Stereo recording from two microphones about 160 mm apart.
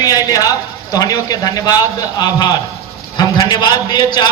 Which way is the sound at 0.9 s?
25° left (ahead or behind).